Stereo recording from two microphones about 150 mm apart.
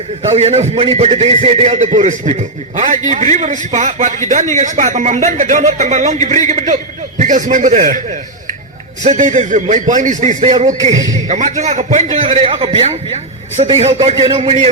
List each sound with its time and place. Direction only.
0.2 s a man's voice: 45° right (ahead or behind)
9.0 s a man's voice: 55° right (ahead or behind)
10.9 s a man's voice: 25° right (ahead or behind)
11.3 s a man's voice: 55° right (ahead or behind)
12.2 s a man's voice: 40° right (ahead or behind)